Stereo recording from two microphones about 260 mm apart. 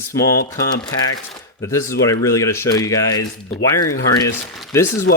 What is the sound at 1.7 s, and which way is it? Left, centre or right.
Speech, centre.